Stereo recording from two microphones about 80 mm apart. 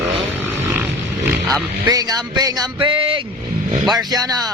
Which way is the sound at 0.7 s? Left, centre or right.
Right.